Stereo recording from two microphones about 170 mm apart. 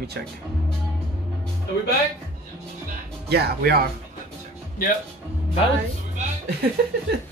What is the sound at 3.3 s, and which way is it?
Speech, 70° right (ahead or behind).